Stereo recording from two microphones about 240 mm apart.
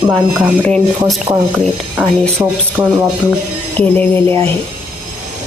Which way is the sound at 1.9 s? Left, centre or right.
Centre.